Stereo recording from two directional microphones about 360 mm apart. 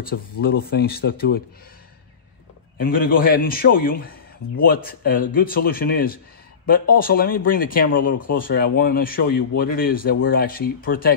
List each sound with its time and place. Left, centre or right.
0.0 s a man's voice: left
2.8 s a man's voice: left